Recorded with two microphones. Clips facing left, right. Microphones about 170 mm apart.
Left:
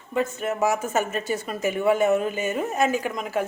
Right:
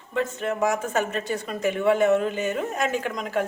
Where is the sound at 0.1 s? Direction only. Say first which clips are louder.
Left 1 dB; 10° left (ahead or behind).